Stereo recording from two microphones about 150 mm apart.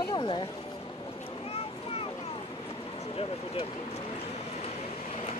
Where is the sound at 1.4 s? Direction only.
40° left (ahead or behind).